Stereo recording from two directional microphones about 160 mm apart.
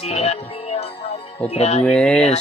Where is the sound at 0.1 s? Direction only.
40° left (ahead or behind).